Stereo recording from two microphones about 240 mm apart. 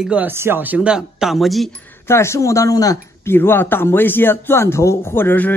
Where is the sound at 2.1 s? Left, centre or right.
Centre.